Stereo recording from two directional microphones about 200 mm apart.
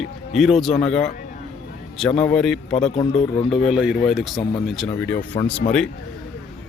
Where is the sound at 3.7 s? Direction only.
5° right (ahead or behind).